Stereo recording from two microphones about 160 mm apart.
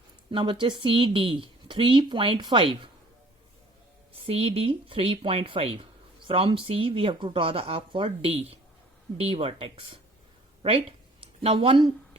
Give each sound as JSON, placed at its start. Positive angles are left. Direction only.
{"t": 0.3, "sound": "speech", "side_deg": -30}
{"t": 4.3, "sound": "speech", "side_deg": -35}
{"t": 10.6, "sound": "a sound", "side_deg": -35}